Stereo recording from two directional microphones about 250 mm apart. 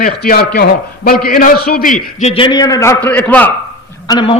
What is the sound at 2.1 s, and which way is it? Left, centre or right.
A man's voice, left.